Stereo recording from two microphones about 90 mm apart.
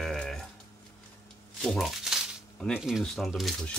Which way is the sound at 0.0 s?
5° left (ahead or behind).